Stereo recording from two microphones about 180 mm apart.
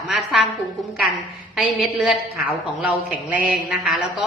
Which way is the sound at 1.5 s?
Centre (ahead or behind).